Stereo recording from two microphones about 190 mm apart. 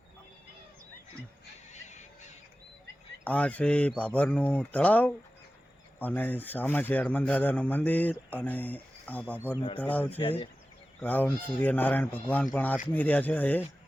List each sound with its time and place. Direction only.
1.7 s a sound: 40° left (ahead or behind)
3.2 s a man's voice: 5° left (ahead or behind)
10.2 s speech: 30° left (ahead or behind)
11.0 s a man's voice: 10° left (ahead or behind)